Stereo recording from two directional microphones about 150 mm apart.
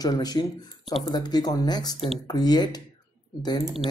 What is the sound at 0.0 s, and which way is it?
Speech, 25° left (ahead or behind).